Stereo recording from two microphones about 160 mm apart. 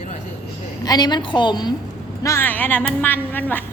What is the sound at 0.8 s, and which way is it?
Speech, 25° left (ahead or behind).